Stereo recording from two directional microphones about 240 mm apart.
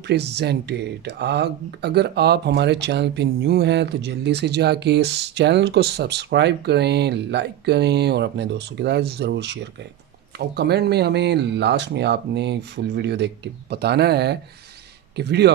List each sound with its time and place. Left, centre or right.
0.0 s speech: right